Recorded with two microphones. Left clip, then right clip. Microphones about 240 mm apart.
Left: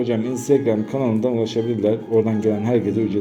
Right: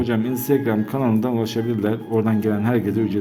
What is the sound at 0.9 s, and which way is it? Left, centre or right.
A man's voice, right.